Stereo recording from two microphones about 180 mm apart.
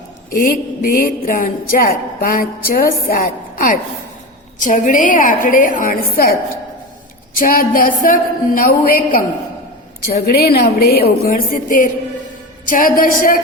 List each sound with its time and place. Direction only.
0.3 s a woman's voice: 55° left (ahead or behind)
7.3 s a woman's voice: 50° left (ahead or behind)
10.2 s a woman's voice: 60° left (ahead or behind)